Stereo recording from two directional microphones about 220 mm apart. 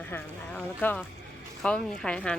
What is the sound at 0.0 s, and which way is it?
Speech, 5° left (ahead or behind).